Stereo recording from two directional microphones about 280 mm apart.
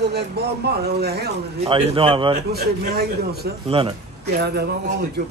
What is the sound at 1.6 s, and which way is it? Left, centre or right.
Speech, centre.